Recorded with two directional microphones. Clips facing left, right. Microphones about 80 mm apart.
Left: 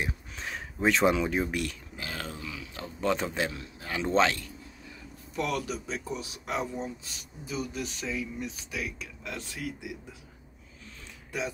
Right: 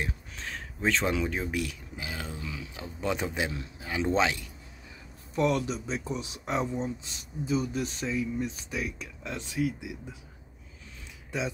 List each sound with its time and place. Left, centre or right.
0.0 s a sound: centre
1.1 s speech: centre
2.0 s speech: centre
2.4 s a sound: right
2.7 s speech: centre
5.3 s speech: right; by 9.9 s centre